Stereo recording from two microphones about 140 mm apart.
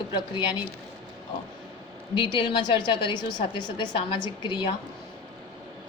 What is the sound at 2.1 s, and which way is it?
A woman's voice, 35° left (ahead or behind).